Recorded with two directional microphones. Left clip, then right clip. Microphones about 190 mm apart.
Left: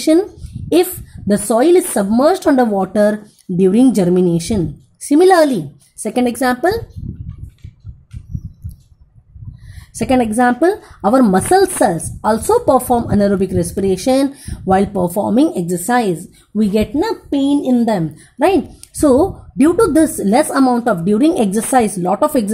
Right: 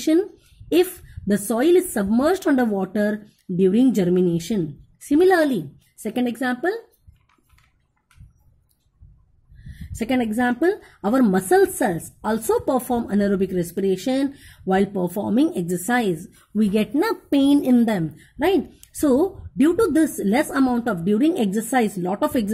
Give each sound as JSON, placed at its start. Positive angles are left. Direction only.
{"t": 0.0, "sound": "a sound", "side_deg": -5}
{"t": 0.9, "sound": "a woman's voice", "side_deg": -10}
{"t": 9.8, "sound": "a woman's voice", "side_deg": 0}
{"t": 17.3, "sound": "a child's voice", "side_deg": -40}
{"t": 18.1, "sound": "a woman's voice", "side_deg": 0}